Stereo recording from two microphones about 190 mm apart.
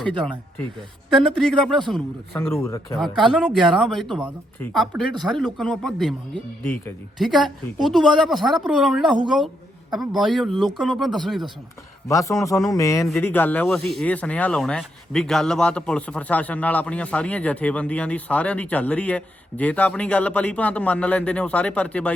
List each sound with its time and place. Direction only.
1.1 s a woman's voice: 5° left (ahead or behind)
2.5 s speech: 15° left (ahead or behind)
3.0 s a woman's voice: centre (ahead or behind)
12.0 s speech: 15° left (ahead or behind)